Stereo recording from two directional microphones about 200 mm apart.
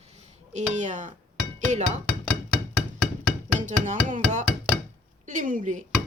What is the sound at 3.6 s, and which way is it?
Speech, 40° right (ahead or behind).